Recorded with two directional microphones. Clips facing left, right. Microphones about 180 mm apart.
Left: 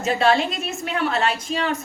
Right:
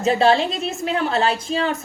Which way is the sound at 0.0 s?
30° right (ahead or behind).